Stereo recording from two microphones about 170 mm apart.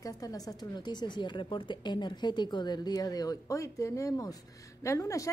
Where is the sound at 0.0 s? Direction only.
20° left (ahead or behind).